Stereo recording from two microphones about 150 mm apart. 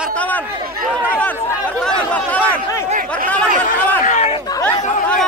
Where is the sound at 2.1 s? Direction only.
10° left (ahead or behind).